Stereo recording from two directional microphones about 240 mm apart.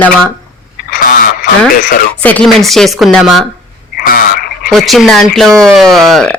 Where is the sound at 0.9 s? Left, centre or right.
Left.